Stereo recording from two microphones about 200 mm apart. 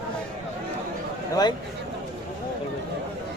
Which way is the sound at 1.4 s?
20° left (ahead or behind).